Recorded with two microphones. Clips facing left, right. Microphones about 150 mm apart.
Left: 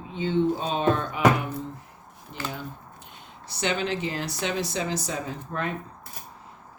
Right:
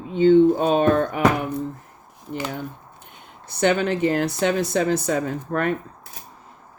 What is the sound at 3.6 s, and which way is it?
Speech, 55° right (ahead or behind).